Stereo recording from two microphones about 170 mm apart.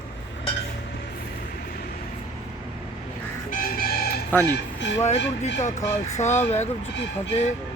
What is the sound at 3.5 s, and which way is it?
Music, 60° left (ahead or behind).